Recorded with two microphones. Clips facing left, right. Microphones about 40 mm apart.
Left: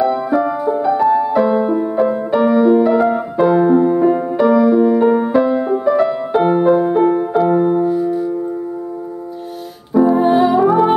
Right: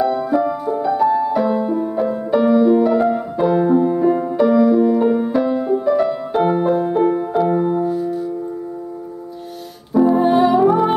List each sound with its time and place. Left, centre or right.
0.0 s music: centre
9.9 s music: centre